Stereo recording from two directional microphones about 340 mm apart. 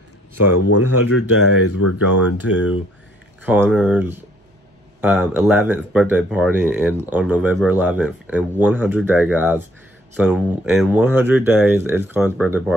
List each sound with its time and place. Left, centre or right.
0.7 s speech: left
1.8 s speech: left
2.2 s speech: centre